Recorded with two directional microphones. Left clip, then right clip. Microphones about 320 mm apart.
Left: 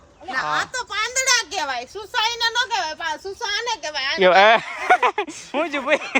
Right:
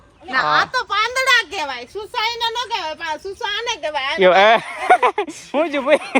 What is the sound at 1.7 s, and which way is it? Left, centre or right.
Speech, centre.